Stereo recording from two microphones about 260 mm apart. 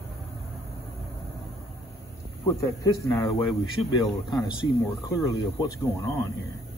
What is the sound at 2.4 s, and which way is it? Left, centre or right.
Speech, centre.